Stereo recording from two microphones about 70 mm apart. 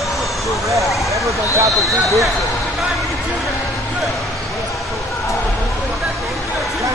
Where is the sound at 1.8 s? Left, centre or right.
Centre.